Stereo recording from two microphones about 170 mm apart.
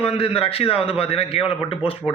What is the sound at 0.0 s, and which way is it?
A man's voice, 35° left (ahead or behind).